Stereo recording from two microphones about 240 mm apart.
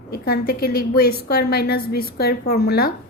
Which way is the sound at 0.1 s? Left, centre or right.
Left.